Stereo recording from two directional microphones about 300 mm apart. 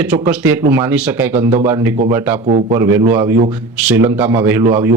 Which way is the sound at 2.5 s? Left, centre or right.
Right.